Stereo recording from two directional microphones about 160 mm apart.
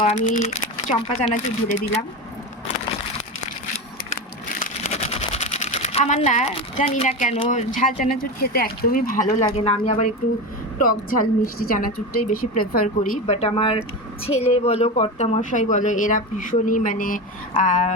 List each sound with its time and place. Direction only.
0.0 s a woman's voice: 45° left (ahead or behind)
4.9 s a sound: 40° left (ahead or behind)
7.5 s a woman's voice: 50° left (ahead or behind)
9.4 s speech: 40° left (ahead or behind)
10.8 s a woman's voice: 60° left (ahead or behind)